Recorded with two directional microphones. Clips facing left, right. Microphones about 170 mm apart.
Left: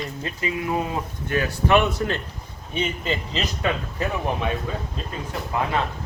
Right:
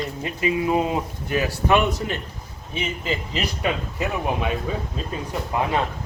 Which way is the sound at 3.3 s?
10° right (ahead or behind).